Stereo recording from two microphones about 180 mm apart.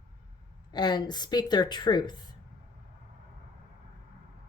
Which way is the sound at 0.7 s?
25° left (ahead or behind).